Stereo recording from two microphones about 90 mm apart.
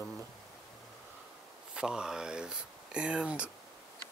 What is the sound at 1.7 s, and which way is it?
Speech, 10° right (ahead or behind).